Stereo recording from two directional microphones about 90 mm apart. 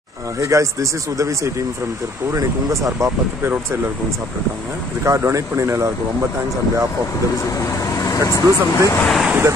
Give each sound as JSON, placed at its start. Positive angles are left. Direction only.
{"t": 0.4, "sound": "speech", "side_deg": -35}
{"t": 5.0, "sound": "speech", "side_deg": -35}
{"t": 8.0, "sound": "speech", "side_deg": 40}
{"t": 9.0, "sound": "speech", "side_deg": 0}